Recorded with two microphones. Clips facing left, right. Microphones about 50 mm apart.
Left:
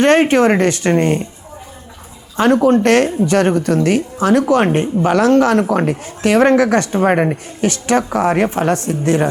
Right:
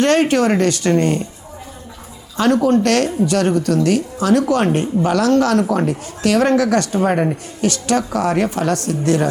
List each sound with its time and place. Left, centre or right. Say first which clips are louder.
0.0 s speech: left 3 dB; left
2.3 s speech: left 2 dB; left